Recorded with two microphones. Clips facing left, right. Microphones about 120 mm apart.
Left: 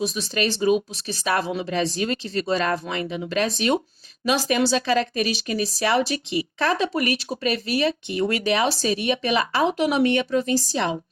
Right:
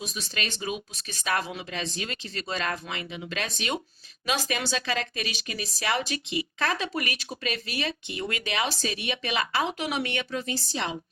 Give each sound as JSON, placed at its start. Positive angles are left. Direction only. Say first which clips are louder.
{"t": 0.6, "sound": "speech", "louder": "left 13 dB", "side_deg": 35}